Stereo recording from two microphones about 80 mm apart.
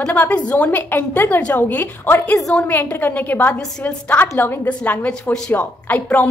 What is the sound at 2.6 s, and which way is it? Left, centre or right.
A woman's voice, left.